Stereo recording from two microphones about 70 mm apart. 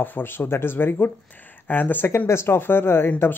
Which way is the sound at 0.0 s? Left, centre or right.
Left.